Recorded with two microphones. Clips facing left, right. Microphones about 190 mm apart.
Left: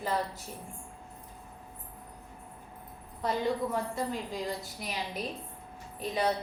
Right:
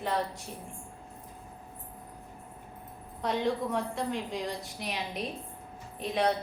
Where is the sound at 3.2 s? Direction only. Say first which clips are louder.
Even; centre (ahead or behind).